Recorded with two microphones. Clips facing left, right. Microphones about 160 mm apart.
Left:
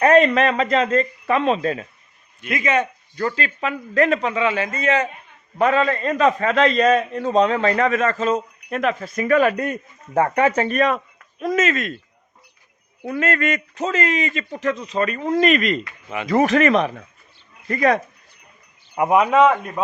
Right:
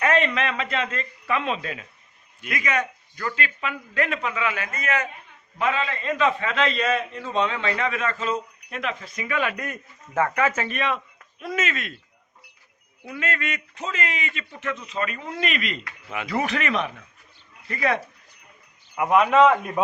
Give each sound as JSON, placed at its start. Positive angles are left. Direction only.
{"t": 0.0, "sound": "a man's voice", "side_deg": 40}
{"t": 2.5, "sound": "a man's voice", "side_deg": 25}
{"t": 5.5, "sound": "a man's voice", "side_deg": 45}
{"t": 13.1, "sound": "a man's voice", "side_deg": 45}
{"t": 19.0, "sound": "a man's voice", "side_deg": 15}
{"t": 19.3, "sound": "a man's voice", "side_deg": 5}